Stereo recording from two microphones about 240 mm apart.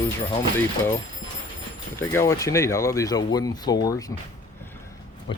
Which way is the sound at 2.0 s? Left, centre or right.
Centre.